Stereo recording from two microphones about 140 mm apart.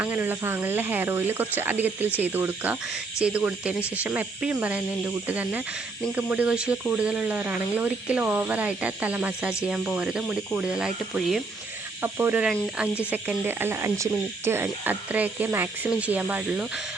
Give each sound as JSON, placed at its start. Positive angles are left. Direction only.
{"t": 0.0, "sound": "speech", "side_deg": -15}
{"t": 12.0, "sound": "speech", "side_deg": -20}